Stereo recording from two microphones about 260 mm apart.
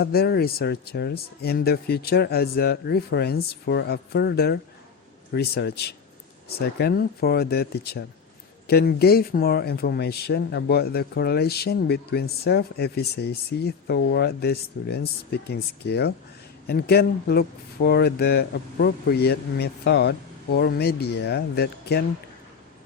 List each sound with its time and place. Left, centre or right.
0.0 s speech: left